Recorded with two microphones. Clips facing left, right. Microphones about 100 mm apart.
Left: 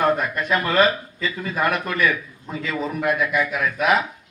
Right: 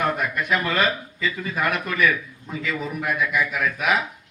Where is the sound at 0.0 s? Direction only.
40° left (ahead or behind).